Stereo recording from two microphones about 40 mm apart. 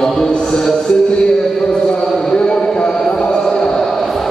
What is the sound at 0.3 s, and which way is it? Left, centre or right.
Music, left.